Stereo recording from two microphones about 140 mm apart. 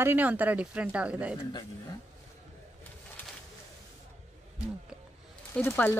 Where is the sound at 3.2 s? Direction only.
15° left (ahead or behind).